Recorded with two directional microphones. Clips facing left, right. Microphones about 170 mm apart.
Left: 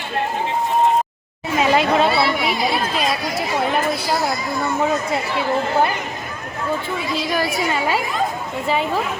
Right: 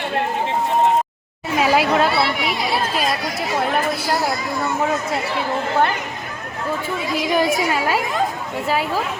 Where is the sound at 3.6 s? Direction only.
Centre (ahead or behind).